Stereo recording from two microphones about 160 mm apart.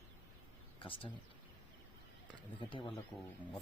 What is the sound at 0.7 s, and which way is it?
Speech, 35° left (ahead or behind).